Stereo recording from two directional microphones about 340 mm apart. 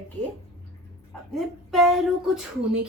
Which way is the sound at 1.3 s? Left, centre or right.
Centre.